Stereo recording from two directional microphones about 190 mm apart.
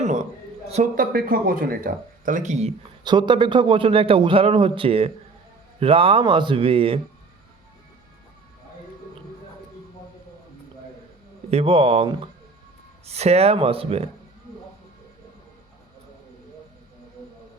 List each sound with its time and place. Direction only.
0.0 s a sound: 35° right (ahead or behind)
0.7 s speech: 40° right (ahead or behind)
3.0 s a man's voice: 25° right (ahead or behind)
11.5 s a man's voice: 30° right (ahead or behind)